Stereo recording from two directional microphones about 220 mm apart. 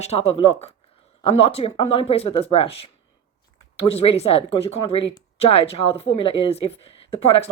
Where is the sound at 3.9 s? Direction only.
25° left (ahead or behind).